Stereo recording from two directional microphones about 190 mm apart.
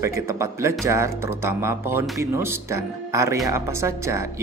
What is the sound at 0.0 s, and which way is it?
Speech, 15° right (ahead or behind).